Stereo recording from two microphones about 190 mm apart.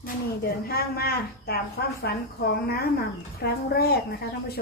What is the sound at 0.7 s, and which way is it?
Speech, 55° left (ahead or behind).